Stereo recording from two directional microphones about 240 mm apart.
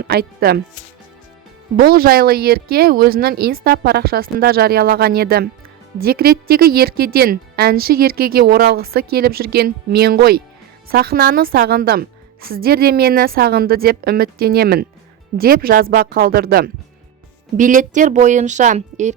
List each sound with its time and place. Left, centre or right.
0.0 s speech: right
1.7 s a woman's voice: right